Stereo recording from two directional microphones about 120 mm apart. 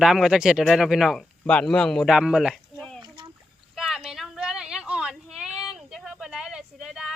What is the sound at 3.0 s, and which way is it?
Boat, 40° right (ahead or behind).